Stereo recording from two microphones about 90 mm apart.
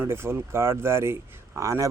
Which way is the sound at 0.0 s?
30° right (ahead or behind).